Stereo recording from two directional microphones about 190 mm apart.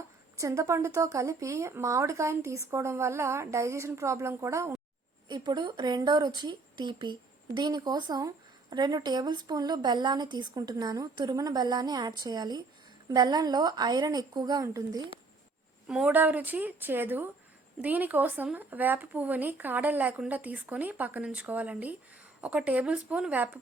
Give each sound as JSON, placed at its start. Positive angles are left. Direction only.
{"t": 0.3, "sound": "speech", "side_deg": -15}
{"t": 15.9, "sound": "speech", "side_deg": -5}